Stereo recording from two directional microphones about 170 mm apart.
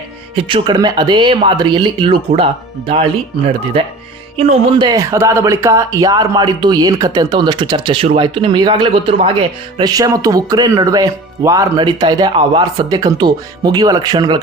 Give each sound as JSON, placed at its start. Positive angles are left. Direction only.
{"t": 0.3, "sound": "speech", "side_deg": -30}
{"t": 4.4, "sound": "speech", "side_deg": -35}
{"t": 4.9, "sound": "speech", "side_deg": -15}